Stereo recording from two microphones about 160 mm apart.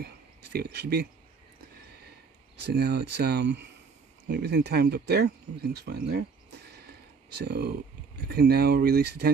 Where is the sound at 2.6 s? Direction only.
90° right.